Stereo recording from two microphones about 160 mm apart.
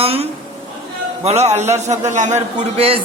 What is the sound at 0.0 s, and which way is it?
A man's voice, 40° right (ahead or behind).